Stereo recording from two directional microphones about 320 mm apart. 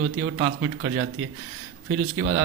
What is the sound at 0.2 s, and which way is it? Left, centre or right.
A man's voice, right.